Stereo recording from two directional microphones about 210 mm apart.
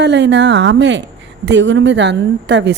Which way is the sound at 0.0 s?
55° right (ahead or behind).